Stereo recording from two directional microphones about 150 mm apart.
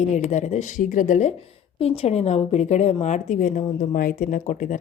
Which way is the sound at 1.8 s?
45° left (ahead or behind).